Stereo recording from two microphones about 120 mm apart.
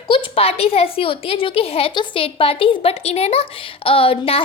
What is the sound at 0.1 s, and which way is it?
A woman's voice, 50° left (ahead or behind).